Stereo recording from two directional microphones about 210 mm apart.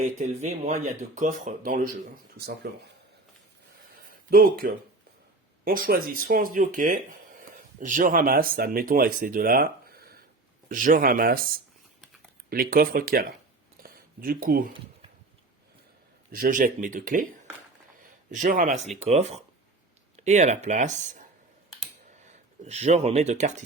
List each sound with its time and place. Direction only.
0.0 s speech: 35° right (ahead or behind)
4.3 s speech: 45° right (ahead or behind)
13.8 s a sound: 45° right (ahead or behind)
16.3 s speech: 40° right (ahead or behind)
18.3 s speech: 40° right (ahead or behind)